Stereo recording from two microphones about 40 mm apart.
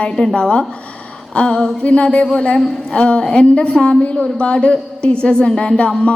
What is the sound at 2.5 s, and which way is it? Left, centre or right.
Speech, centre.